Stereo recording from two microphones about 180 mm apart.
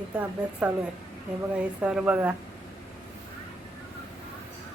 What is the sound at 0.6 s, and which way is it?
A woman's voice, 10° right (ahead or behind).